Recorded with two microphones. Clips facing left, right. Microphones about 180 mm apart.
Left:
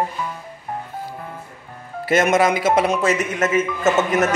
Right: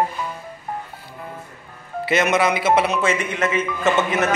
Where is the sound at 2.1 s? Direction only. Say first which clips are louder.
Left 2 dB; 45° left (ahead or behind).